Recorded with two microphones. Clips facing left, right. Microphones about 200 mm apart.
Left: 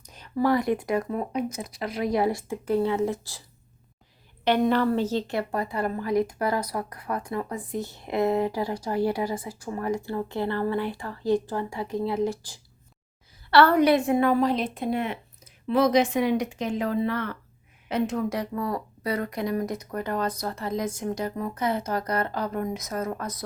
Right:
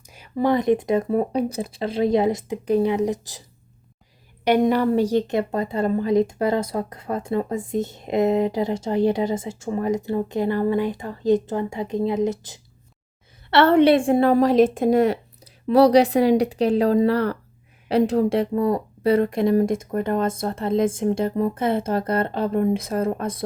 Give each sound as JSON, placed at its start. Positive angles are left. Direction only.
{"t": 0.0, "sound": "a sound", "side_deg": -10}
{"t": 0.3, "sound": "a woman's voice", "side_deg": -20}
{"t": 1.0, "sound": "a woman's voice", "side_deg": -35}
{"t": 4.4, "sound": "a woman's voice", "side_deg": -10}